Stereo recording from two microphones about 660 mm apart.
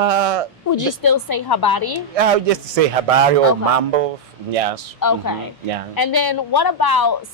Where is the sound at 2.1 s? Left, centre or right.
Right.